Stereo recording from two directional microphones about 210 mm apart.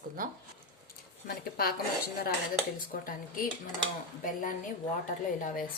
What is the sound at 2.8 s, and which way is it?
Speech, 40° left (ahead or behind).